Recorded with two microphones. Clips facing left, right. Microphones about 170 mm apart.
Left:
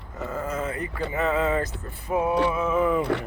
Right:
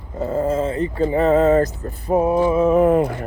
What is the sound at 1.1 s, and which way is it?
Male singing, 40° right (ahead or behind).